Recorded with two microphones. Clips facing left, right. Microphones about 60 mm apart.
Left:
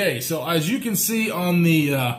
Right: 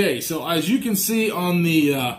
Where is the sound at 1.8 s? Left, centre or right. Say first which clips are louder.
Right 3 dB; left.